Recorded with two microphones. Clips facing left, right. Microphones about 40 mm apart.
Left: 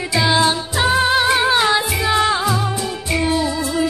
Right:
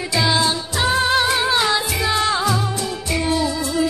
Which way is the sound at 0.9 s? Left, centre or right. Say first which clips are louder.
Left 2 dB; centre.